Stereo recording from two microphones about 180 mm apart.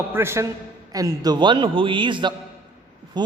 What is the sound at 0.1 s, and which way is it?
A man's voice, 15° right (ahead or behind).